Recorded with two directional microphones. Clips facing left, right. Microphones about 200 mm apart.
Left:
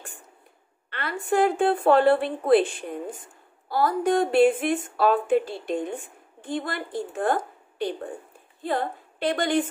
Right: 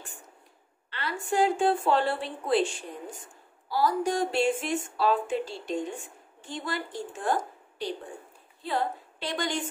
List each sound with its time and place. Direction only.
0.8 s a woman's voice: 55° left (ahead or behind)